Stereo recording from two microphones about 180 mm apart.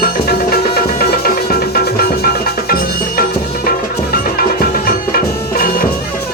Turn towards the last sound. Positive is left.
turn(degrees=55)  # may be behind; listen again after turning